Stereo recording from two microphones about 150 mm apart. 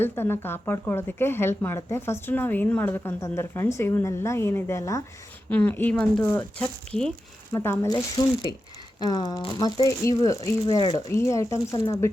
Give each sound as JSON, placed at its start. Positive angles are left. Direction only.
{"t": 0.0, "sound": "speech", "side_deg": 15}
{"t": 5.5, "sound": "speech", "side_deg": 10}
{"t": 7.5, "sound": "speech", "side_deg": 20}
{"t": 9.0, "sound": "speech", "side_deg": 30}
{"t": 11.1, "sound": "speech", "side_deg": 20}